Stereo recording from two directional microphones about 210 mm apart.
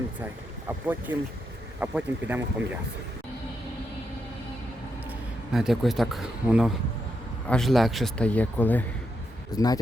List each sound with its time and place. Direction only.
0.7 s speech: 10° right (ahead or behind)
5.0 s speech: centre (ahead or behind); by 9.8 s 20° left (ahead or behind)